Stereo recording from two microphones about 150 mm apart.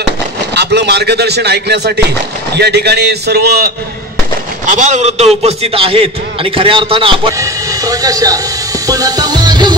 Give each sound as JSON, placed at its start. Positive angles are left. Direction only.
{"t": 0.7, "sound": "speech", "side_deg": -90}
{"t": 4.6, "sound": "a man's voice", "side_deg": -55}
{"t": 7.3, "sound": "train", "side_deg": -20}
{"t": 8.8, "sound": "music", "side_deg": -25}